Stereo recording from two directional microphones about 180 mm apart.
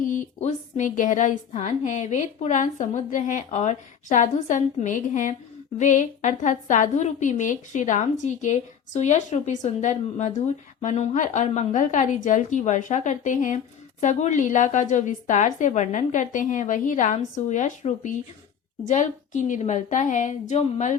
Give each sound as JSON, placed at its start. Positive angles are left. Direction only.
{"t": 0.0, "sound": "a woman's voice", "side_deg": 45}